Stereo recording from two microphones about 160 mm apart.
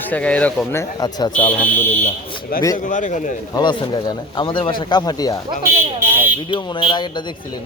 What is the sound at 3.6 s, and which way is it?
Speech, 25° left (ahead or behind).